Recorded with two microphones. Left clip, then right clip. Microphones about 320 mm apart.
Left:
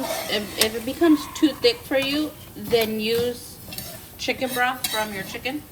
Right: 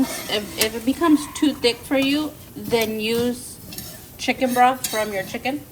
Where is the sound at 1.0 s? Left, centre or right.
Centre.